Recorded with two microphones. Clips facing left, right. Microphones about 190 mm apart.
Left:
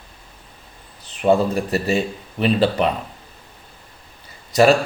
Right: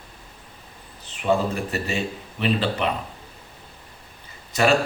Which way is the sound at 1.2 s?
35° left (ahead or behind).